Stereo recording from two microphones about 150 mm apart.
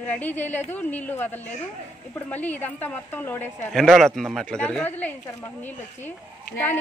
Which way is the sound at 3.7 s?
Centre (ahead or behind).